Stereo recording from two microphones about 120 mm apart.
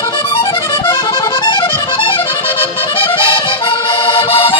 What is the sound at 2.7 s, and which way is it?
Accordion, 45° left (ahead or behind).